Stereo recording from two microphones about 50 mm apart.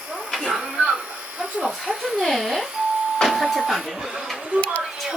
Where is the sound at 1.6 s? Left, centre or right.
Centre.